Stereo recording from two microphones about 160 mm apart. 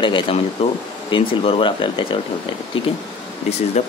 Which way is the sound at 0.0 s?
35° left (ahead or behind).